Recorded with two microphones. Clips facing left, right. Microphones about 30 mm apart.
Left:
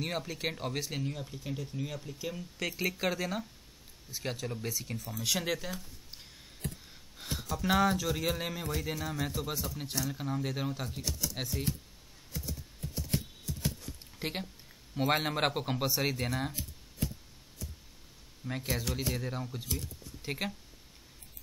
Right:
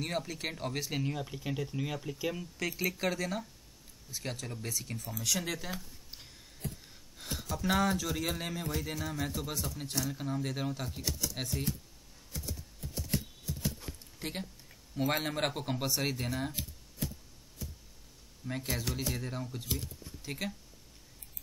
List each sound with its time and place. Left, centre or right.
0.0 s speech: centre
1.0 s speech: centre
2.6 s speech: centre
5.2 s speech: centre
7.2 s speech: centre
12.3 s a sound: centre
13.9 s a sound: centre
14.2 s speech: centre
18.4 s speech: centre
20.2 s speech: centre